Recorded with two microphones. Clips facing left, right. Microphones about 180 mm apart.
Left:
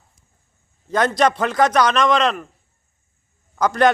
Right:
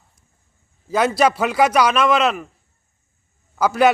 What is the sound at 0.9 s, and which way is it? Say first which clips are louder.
A man's voice: right 1 dB; 5° right (ahead or behind).